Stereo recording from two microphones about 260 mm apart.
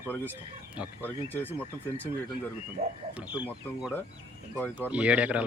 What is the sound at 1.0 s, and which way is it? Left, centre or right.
Speech, centre.